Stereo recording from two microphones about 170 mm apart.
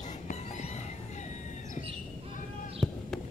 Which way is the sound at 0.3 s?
45° left (ahead or behind).